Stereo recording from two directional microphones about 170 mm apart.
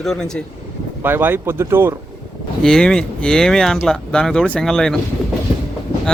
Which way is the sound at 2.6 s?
5° left (ahead or behind).